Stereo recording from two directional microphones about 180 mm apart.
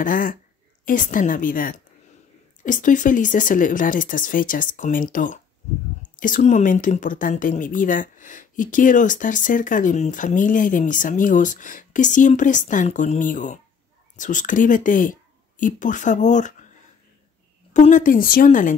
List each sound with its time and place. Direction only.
0.0 s speech: 50° left (ahead or behind)
17.7 s speech: 45° left (ahead or behind)